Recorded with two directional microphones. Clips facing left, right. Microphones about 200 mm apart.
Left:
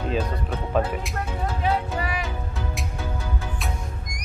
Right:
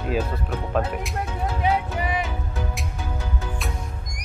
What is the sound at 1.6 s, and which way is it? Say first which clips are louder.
Speech: right 2 dB; 20° right (ahead or behind).